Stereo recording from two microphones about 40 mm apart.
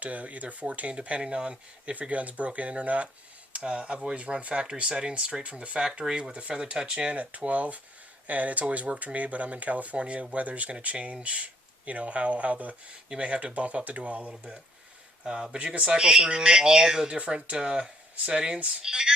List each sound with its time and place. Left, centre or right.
0.0 s speech: right
4.6 s speech: right
15.2 s speech: centre
15.5 s speech: right
17.2 s speech: right; by 19.1 s centre